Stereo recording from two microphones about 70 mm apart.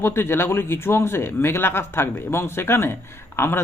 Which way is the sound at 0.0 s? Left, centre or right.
Left.